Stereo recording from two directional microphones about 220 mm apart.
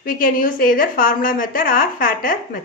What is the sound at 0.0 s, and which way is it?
A woman's voice, 40° left (ahead or behind).